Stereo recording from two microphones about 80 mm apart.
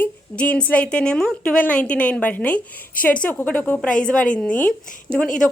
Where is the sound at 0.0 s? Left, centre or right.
Centre.